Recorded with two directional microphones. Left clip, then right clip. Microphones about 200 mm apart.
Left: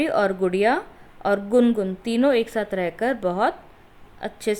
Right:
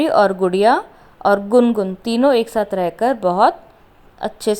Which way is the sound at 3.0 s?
15° right (ahead or behind).